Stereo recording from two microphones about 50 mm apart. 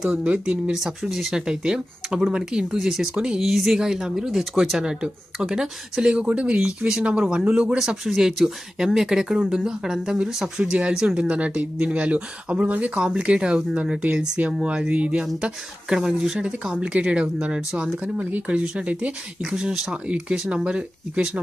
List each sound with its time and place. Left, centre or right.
0.0 s speech: centre
0.7 s speech: centre
6.1 s speech: right
11.2 s speech: right
12.9 s speech: centre
19.4 s speech: centre